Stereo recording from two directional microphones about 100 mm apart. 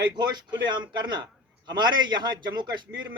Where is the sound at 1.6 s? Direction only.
45° right (ahead or behind).